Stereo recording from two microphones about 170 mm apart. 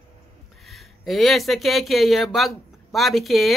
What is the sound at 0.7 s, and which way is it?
A woman's voice, centre (ahead or behind).